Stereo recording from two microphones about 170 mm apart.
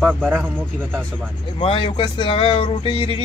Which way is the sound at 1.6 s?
35° left (ahead or behind).